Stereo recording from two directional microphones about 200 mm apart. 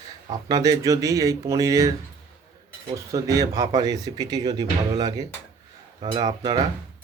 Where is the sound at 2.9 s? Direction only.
15° right (ahead or behind).